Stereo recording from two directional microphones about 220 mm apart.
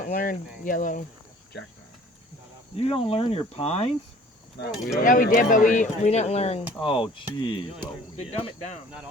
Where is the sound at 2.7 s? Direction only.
25° left (ahead or behind).